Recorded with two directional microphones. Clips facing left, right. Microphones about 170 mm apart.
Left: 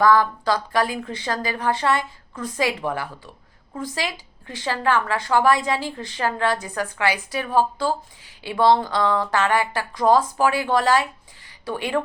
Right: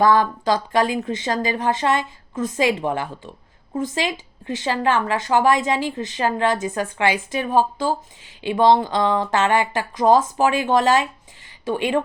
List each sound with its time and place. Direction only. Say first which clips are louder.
0.0 s a woman's voice: right 1 dB; 20° right (ahead or behind)